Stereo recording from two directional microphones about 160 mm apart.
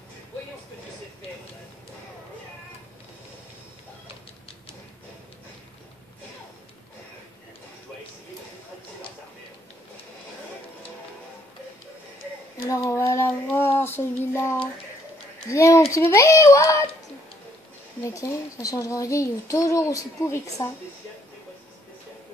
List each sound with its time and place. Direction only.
12.6 s child singing: 20° left (ahead or behind)
13.6 s a sound: 15° left (ahead or behind)
15.5 s a child's voice: 20° left (ahead or behind)
18.0 s a child's voice: 20° left (ahead or behind)